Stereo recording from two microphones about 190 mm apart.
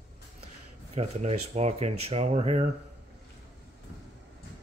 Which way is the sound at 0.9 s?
35° right (ahead or behind).